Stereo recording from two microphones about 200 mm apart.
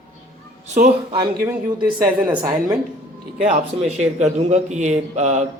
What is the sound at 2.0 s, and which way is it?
Speech, 10° right (ahead or behind).